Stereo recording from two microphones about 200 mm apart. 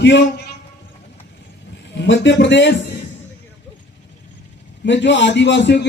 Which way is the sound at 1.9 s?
65° left (ahead or behind).